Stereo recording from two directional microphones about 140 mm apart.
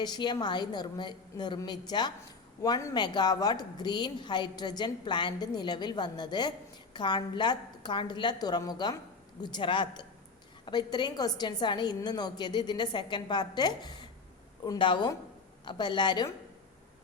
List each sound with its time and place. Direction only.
0.0 s a woman's voice: 30° left (ahead or behind)